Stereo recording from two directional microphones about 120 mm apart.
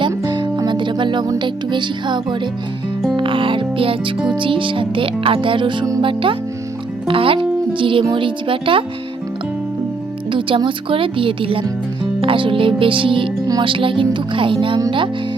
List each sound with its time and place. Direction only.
0.0 s music: 40° right (ahead or behind)
4.4 s speech: 45° right (ahead or behind)
10.3 s speech: 45° right (ahead or behind)
14.8 s music: 40° right (ahead or behind)